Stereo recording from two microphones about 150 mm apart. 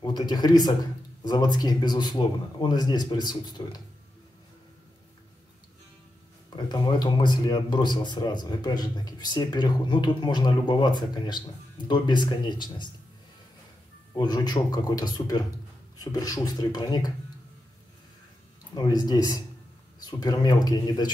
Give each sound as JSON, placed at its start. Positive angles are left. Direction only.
{"t": 0.0, "sound": "speech", "side_deg": 30}
{"t": 6.5, "sound": "speech", "side_deg": 30}
{"t": 14.1, "sound": "speech", "side_deg": 25}
{"t": 18.8, "sound": "speech", "side_deg": 25}